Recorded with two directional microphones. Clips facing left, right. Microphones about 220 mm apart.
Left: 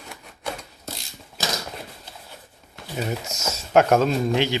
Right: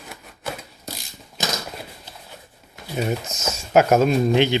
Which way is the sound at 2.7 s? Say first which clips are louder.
Right 4 dB; 10° right (ahead or behind).